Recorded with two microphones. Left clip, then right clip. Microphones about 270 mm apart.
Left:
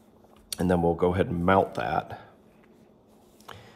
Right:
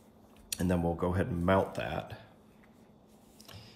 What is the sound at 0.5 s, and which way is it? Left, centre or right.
Speech, centre.